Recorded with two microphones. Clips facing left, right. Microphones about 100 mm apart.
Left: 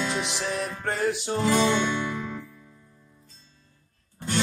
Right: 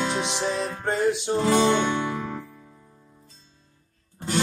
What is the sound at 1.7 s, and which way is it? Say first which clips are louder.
Music: right 2 dB; 50° right (ahead or behind).